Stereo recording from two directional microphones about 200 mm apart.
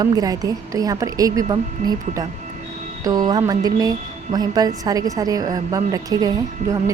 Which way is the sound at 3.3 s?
20° right (ahead or behind).